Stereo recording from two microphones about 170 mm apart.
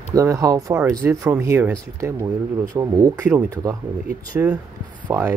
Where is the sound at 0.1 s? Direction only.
20° right (ahead or behind).